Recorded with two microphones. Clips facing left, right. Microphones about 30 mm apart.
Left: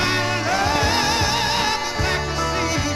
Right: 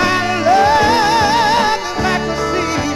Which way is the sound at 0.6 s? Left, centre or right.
Right.